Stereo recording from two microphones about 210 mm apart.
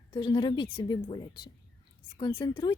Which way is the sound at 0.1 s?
20° left (ahead or behind).